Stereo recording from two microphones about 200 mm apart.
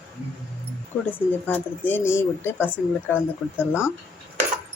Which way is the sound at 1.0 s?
10° left (ahead or behind).